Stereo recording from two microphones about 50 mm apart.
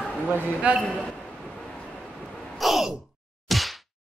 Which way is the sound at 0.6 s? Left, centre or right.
Right.